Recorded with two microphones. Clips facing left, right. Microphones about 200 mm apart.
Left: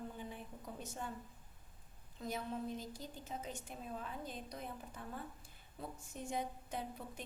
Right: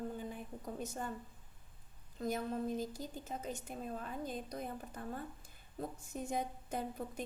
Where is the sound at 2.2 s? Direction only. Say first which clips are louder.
Right 5 dB; 45° right (ahead or behind).